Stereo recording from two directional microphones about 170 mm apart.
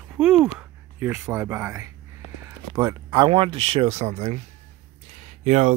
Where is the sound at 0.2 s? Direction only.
5° right (ahead or behind).